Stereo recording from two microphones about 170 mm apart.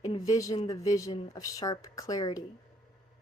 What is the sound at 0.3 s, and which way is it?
Speech, 20° left (ahead or behind).